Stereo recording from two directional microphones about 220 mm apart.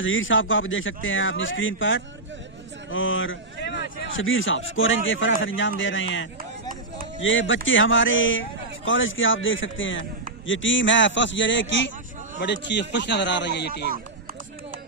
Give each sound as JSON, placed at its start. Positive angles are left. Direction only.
{"t": 0.0, "sound": "a man's voice", "side_deg": 60}